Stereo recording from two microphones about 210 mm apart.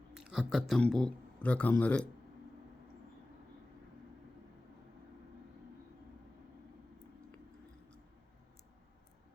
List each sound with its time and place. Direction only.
0.1 s speech: 5° right (ahead or behind)